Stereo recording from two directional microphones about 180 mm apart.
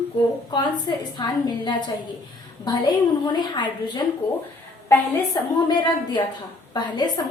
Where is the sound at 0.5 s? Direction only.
25° left (ahead or behind).